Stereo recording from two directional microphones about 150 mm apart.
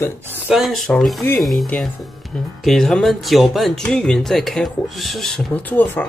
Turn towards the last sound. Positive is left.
turn(degrees=10)  # may be behind; listen again after turning